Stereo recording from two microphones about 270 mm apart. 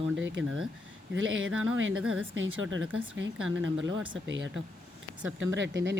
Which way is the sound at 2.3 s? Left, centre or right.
Right.